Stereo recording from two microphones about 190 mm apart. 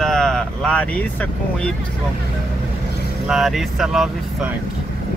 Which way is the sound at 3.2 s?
Centre (ahead or behind).